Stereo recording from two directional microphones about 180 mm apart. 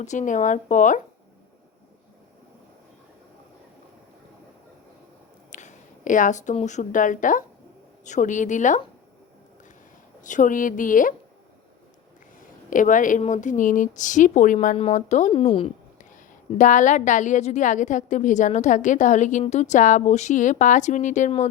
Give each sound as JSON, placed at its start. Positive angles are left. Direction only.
{"t": 0.0, "sound": "a woman's voice", "side_deg": 45}
{"t": 5.5, "sound": "a woman's voice", "side_deg": 40}
{"t": 10.2, "sound": "a woman's voice", "side_deg": 45}
{"t": 12.7, "sound": "a woman's voice", "side_deg": 45}
{"t": 16.1, "sound": "a woman's voice", "side_deg": 45}